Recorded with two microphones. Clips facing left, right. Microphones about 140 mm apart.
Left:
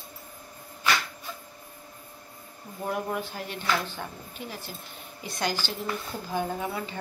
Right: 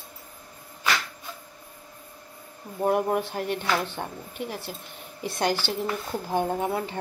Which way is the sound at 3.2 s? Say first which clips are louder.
Right 6 dB; 65° right (ahead or behind).